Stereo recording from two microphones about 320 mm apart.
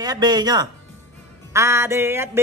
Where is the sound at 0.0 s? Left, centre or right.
Centre.